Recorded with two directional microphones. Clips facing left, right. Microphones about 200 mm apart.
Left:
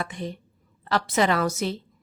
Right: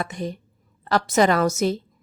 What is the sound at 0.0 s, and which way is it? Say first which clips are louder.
A woman's voice: right 3 dB; 40° right (ahead or behind).